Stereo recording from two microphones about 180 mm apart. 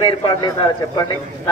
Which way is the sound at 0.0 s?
25° left (ahead or behind).